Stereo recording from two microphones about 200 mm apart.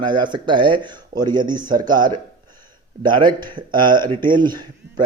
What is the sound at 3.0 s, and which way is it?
Speech, 25° right (ahead or behind).